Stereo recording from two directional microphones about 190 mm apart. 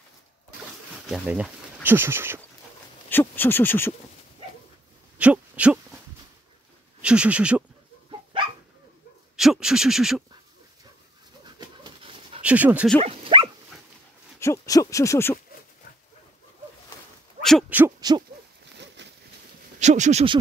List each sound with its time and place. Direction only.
1.0 s speech: 5° right (ahead or behind)
3.1 s owl: 10° left (ahead or behind)
5.2 s speech: 5° right (ahead or behind)
7.0 s speech: 5° right (ahead or behind)
9.4 s a sound: centre (ahead or behind)
11.4 s dog: 25° right (ahead or behind)
12.4 s speech: 5° right (ahead or behind)
13.0 s dog: 30° right (ahead or behind)
14.4 s owl: 15° left (ahead or behind)
17.4 s owl: centre (ahead or behind)
17.6 s hoot: 10° right (ahead or behind)
19.0 s a sound: 65° right (ahead or behind)
19.8 s speech: 40° right (ahead or behind)